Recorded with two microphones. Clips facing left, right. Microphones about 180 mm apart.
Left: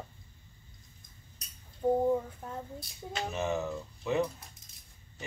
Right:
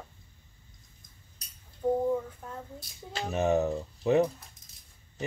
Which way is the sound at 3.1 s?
35° right (ahead or behind).